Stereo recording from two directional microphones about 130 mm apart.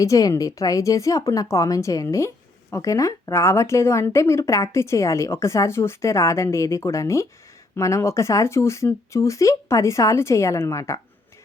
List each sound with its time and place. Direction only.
0.0 s a woman's voice: 25° left (ahead or behind)